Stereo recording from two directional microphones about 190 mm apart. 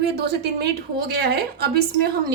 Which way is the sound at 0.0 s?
60° right (ahead or behind).